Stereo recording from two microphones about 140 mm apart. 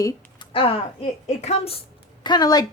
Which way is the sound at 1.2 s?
50° left (ahead or behind).